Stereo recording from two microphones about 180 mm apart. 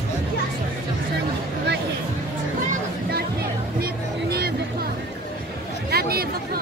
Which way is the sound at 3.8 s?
60° right (ahead or behind).